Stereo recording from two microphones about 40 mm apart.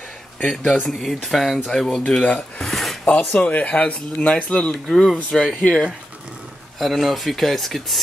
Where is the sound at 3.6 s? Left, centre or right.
Left.